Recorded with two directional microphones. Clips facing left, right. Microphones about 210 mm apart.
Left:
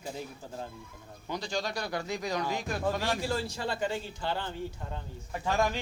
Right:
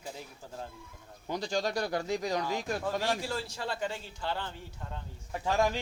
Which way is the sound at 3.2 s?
Centre (ahead or behind).